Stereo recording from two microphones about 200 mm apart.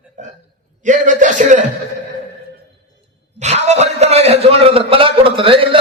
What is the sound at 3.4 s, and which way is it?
A man's voice, 35° right (ahead or behind).